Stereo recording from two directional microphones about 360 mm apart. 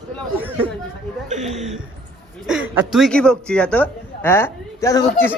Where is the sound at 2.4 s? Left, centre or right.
Centre.